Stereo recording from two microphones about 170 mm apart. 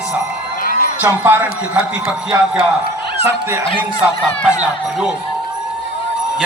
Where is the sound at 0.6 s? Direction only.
55° left (ahead or behind).